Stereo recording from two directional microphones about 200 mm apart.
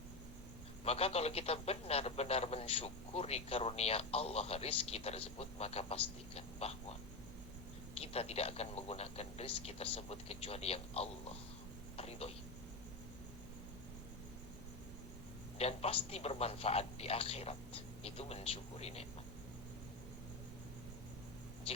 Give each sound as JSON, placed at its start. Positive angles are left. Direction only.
{"t": 0.9, "sound": "a man's voice", "side_deg": 30}
{"t": 7.9, "sound": "a man's voice", "side_deg": 30}
{"t": 11.9, "sound": "a sound", "side_deg": 30}
{"t": 15.5, "sound": "a man's voice", "side_deg": 30}